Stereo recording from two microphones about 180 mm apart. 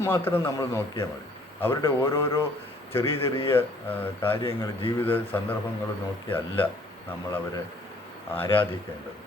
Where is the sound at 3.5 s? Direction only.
10° left (ahead or behind).